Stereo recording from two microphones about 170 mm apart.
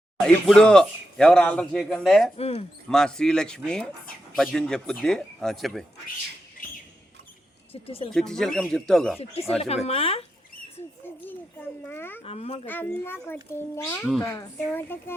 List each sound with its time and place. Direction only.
0.4 s speech: 5° left (ahead or behind)
2.4 s speech: 35° left (ahead or behind)
2.9 s speech: 5° left (ahead or behind)
7.7 s speech: 35° left (ahead or behind)
8.1 s speech: 5° left (ahead or behind)
9.6 s speech: 40° left (ahead or behind)
11.8 s a child's voice: 10° left (ahead or behind)
12.2 s speech: 35° left (ahead or behind)
12.6 s a child's voice: 10° left (ahead or behind)